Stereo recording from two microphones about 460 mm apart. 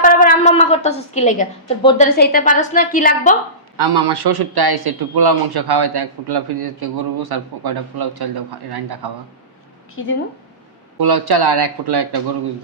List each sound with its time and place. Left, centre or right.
0.0 s a woman's voice: centre
3.8 s a man's voice: right
10.9 s speech: right